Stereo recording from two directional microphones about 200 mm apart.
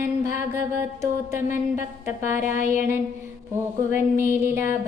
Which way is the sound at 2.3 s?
10° right (ahead or behind).